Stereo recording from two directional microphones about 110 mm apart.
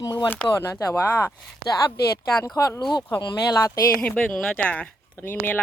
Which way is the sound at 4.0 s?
15° left (ahead or behind).